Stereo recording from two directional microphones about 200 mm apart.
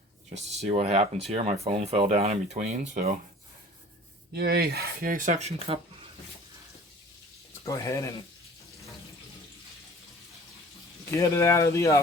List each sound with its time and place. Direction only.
0.3 s speech: 35° right (ahead or behind)
4.4 s speech: 50° right (ahead or behind); by 5.8 s 30° right (ahead or behind)
7.6 s speech: 15° left (ahead or behind)
11.1 s speech: 15° left (ahead or behind)